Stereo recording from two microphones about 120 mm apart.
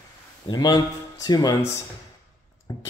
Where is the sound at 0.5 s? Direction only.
35° left (ahead or behind).